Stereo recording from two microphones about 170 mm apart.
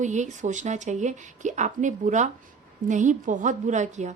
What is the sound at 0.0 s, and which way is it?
A woman's voice, 45° right (ahead or behind).